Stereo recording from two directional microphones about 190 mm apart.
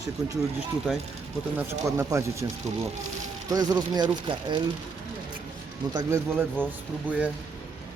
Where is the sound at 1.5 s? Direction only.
15° right (ahead or behind).